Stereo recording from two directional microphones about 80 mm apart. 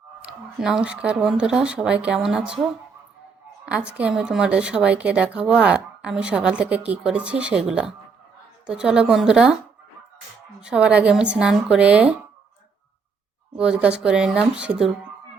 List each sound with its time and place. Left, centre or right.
0.2 s speech: centre
3.7 s speech: centre
10.6 s speech: centre
13.6 s speech: centre